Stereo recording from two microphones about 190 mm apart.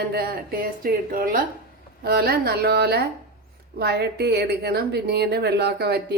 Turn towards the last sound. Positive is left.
turn(degrees=-55)  # may be behind; listen again after turning